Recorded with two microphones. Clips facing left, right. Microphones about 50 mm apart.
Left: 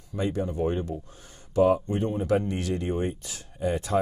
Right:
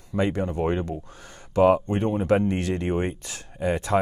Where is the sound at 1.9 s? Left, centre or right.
Right.